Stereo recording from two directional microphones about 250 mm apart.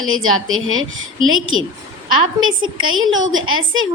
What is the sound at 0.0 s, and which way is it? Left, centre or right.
A woman's voice, right.